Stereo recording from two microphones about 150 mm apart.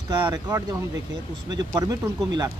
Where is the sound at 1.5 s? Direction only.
30° right (ahead or behind).